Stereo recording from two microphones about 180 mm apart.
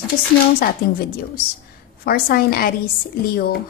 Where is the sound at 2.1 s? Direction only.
55° left (ahead or behind).